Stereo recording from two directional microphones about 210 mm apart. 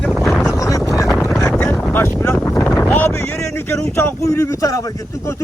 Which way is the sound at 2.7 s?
10° left (ahead or behind).